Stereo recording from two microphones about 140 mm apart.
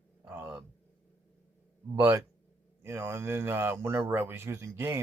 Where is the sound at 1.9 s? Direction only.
20° right (ahead or behind).